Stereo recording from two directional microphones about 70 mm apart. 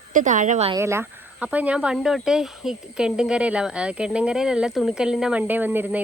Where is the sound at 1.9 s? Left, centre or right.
Centre.